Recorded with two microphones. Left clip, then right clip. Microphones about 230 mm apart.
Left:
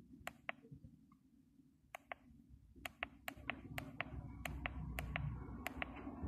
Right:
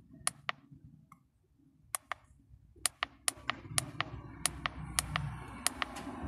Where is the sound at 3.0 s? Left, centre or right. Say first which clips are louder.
Right 10 dB; right.